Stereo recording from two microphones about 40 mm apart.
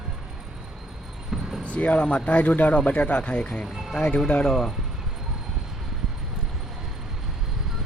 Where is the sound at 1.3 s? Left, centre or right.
Centre.